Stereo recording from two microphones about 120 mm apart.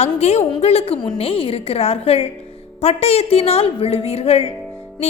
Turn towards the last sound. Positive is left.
turn(degrees=60)  # may be behind; listen again after turning